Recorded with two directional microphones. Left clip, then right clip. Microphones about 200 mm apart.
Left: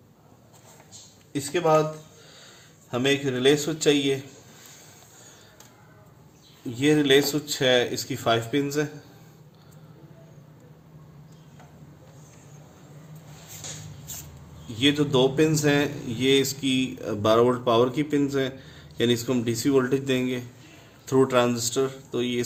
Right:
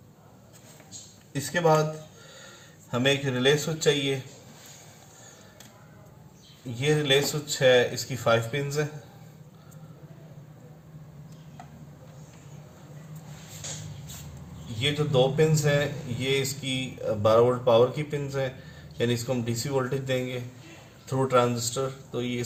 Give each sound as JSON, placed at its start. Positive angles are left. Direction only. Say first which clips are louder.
{"t": 2.9, "sound": "speech", "louder": "left 1 dB", "side_deg": 40}
{"t": 6.7, "sound": "speech", "louder": "left 4 dB", "side_deg": 40}
{"t": 14.8, "sound": "a man's voice", "louder": "left 3 dB", "side_deg": 45}